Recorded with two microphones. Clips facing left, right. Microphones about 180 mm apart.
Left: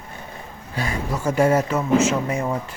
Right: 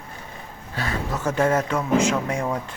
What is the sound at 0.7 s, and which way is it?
Speech, 15° left (ahead or behind).